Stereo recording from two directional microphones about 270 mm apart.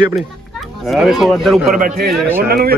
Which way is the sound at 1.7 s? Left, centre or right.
Right.